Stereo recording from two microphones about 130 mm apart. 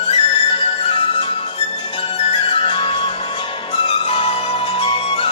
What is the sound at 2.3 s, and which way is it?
Music, 45° left (ahead or behind).